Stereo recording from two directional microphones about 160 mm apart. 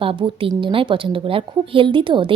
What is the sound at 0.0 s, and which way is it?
A woman's voice, 35° right (ahead or behind).